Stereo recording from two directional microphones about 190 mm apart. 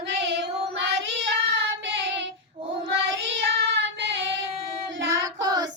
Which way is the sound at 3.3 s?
65° right (ahead or behind).